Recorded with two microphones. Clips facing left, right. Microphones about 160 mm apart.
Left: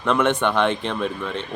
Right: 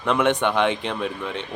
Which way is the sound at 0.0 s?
15° right (ahead or behind).